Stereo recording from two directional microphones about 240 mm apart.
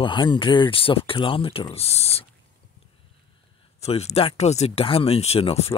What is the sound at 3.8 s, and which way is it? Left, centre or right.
Speech, left.